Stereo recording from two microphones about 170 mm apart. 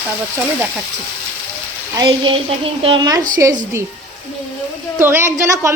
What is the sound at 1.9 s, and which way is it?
Speech, 25° right (ahead or behind).